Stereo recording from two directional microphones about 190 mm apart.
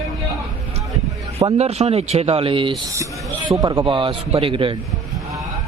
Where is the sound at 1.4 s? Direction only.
35° right (ahead or behind).